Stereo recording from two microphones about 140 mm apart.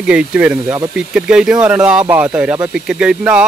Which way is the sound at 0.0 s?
5° right (ahead or behind).